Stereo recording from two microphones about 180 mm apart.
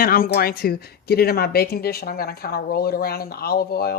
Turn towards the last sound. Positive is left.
turn(degrees=60)  # may be behind; listen again after turning